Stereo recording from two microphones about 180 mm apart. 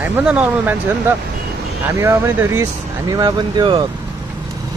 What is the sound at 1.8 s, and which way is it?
Speech, 15° right (ahead or behind).